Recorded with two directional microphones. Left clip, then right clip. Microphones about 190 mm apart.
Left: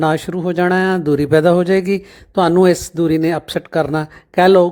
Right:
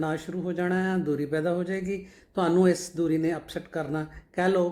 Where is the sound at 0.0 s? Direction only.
50° left (ahead or behind).